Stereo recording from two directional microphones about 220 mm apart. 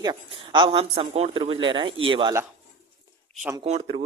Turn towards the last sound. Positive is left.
turn(degrees=-25)  # may be behind; listen again after turning